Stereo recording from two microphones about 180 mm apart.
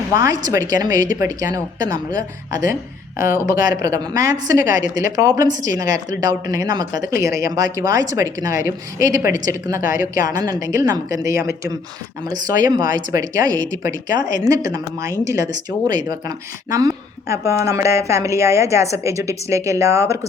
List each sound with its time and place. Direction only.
0.1 s a woman's voice: 20° right (ahead or behind)
3.4 s a woman's voice: 20° right (ahead or behind)